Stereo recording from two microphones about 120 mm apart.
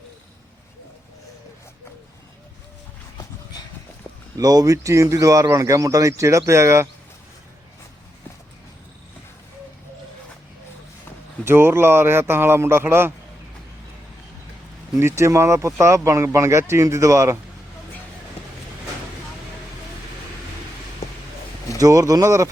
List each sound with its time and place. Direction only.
4.4 s speech: 30° right (ahead or behind)
11.4 s speech: 20° right (ahead or behind)
14.9 s speech: 25° right (ahead or behind)
21.8 s speech: 30° right (ahead or behind)